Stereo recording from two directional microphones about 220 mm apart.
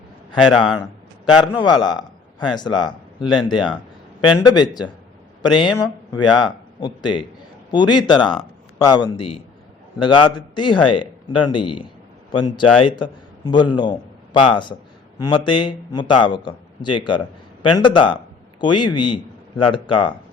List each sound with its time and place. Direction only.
0.5 s a man's voice: centre (ahead or behind)
0.8 s a man's voice: 20° left (ahead or behind)